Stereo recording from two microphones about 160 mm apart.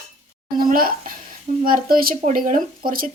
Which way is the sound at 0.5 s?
65° right (ahead or behind).